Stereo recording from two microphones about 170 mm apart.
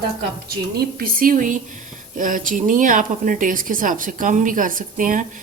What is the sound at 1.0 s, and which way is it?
Speech, 60° right (ahead or behind).